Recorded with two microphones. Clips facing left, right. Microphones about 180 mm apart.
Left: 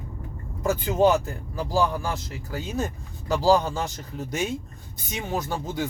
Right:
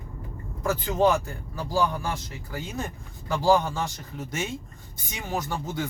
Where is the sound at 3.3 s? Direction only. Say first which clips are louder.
Left 2 dB; 20° left (ahead or behind).